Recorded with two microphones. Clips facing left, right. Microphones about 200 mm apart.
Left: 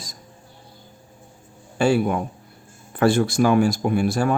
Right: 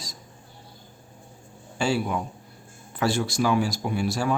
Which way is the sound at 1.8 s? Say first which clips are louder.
Left 6 dB; 55° left (ahead or behind).